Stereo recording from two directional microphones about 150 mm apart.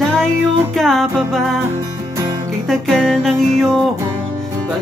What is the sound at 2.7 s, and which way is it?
Music, 5° left (ahead or behind).